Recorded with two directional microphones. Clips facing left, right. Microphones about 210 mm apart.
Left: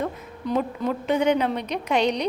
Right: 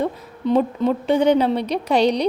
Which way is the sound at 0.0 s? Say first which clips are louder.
Right 6 dB; 30° right (ahead or behind).